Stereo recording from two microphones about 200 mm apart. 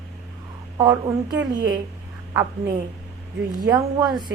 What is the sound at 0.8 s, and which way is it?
Speech, 20° right (ahead or behind).